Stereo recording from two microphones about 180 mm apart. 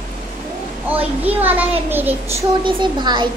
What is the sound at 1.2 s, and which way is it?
Speech, 10° right (ahead or behind).